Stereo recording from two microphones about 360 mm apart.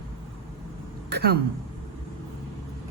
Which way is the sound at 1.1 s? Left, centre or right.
Right.